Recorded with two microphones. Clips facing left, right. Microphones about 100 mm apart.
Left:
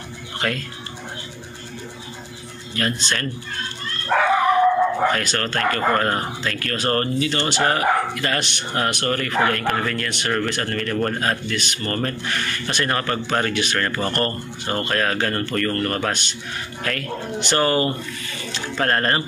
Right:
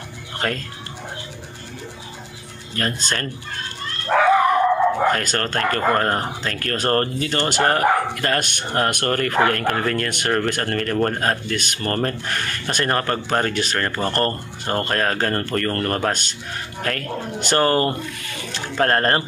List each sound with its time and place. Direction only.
0.4 s speech: 35° right (ahead or behind)
2.7 s speech: 45° right (ahead or behind)
5.1 s speech: 45° right (ahead or behind)
13.7 s speech: 25° right (ahead or behind)
14.1 s speech: 45° right (ahead or behind)